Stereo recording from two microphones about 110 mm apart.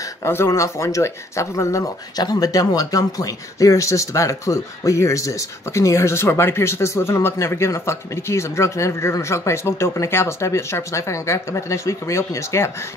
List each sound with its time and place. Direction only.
0.2 s speech: 25° left (ahead or behind)